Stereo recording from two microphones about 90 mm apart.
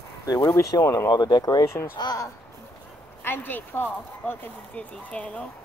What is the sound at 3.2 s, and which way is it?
Speech, 20° left (ahead or behind).